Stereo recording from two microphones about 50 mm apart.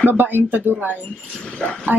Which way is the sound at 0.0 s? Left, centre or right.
Right.